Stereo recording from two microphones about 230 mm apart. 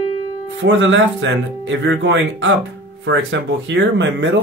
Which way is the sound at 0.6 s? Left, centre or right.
Right.